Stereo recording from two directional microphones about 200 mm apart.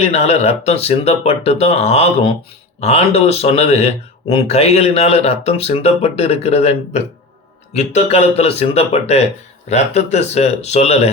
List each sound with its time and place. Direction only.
0.0 s speech: 35° left (ahead or behind)